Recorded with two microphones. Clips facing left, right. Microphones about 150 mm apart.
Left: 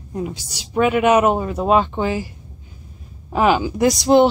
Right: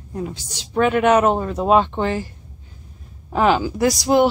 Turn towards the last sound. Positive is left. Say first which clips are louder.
# left 3 dB
turn(degrees=25)  # may be behind; listen again after turning